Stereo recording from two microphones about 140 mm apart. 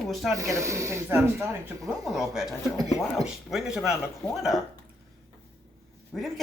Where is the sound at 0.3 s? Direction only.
20° right (ahead or behind).